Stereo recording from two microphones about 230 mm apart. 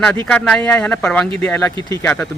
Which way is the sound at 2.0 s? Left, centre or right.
Centre.